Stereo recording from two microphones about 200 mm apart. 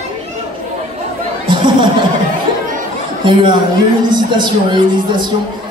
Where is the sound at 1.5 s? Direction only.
25° right (ahead or behind).